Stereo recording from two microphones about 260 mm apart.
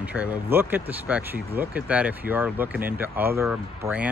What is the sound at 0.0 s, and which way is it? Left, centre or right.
Speech, centre.